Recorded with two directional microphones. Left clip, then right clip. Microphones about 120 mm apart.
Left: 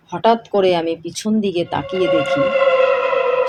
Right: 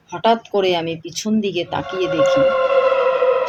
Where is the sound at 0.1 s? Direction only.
60° left (ahead or behind).